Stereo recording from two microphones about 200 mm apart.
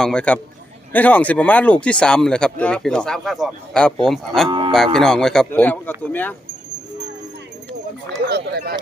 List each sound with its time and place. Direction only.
0.0 s speech: 5° left (ahead or behind)
4.4 s cattle: 25° right (ahead or behind)
4.9 s speech: 5° left (ahead or behind)
8.3 s speech: 50° right (ahead or behind)